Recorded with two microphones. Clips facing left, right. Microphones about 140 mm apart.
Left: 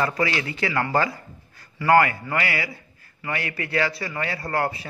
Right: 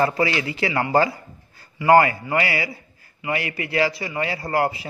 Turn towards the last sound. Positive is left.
turn(degrees=-25)  # may be behind; listen again after turning